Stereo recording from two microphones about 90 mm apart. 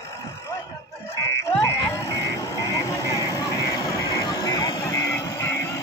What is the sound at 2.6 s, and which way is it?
Vehicle, 40° left (ahead or behind).